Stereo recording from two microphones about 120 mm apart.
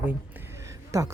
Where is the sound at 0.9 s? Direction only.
25° right (ahead or behind).